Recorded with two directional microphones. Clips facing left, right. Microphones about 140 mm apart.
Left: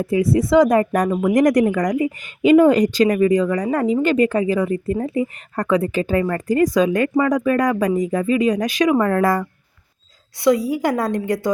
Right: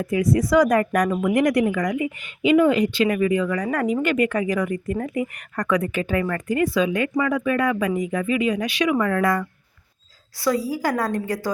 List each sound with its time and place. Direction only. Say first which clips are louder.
0.0 s speech: left 3 dB; 30° left (ahead or behind)
10.3 s a woman's voice: left 6 dB; 20° left (ahead or behind)